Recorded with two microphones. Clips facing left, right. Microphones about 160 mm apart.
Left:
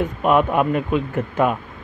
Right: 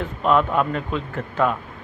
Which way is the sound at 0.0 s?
15° left (ahead or behind).